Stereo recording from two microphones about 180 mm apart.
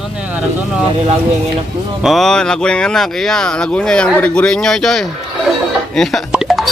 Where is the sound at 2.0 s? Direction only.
Centre (ahead or behind).